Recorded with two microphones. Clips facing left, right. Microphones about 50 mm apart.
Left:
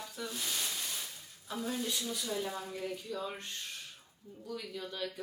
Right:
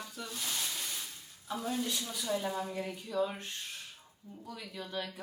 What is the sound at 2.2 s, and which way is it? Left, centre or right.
Speech, centre.